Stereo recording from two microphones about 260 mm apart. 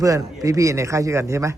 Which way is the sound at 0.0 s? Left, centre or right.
Centre.